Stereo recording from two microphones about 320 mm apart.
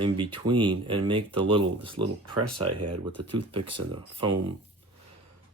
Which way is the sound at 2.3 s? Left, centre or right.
Right.